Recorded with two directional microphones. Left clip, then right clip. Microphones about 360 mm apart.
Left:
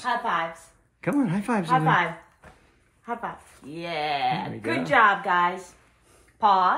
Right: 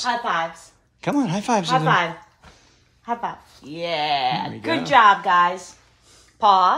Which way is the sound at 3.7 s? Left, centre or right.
Right.